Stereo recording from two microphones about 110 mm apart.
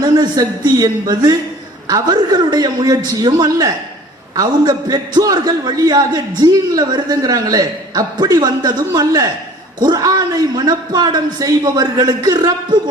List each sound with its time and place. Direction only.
0.0 s a man's voice: 35° right (ahead or behind)